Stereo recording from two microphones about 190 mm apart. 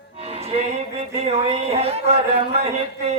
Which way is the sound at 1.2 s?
35° right (ahead or behind).